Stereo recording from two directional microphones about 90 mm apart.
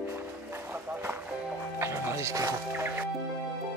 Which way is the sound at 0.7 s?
20° right (ahead or behind).